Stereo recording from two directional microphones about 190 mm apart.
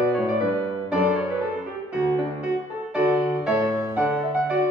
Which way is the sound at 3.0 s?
10° right (ahead or behind).